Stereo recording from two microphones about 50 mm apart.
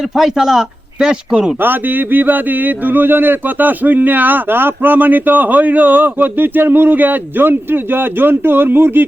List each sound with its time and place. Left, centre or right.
0.2 s speech: centre
2.1 s speech: right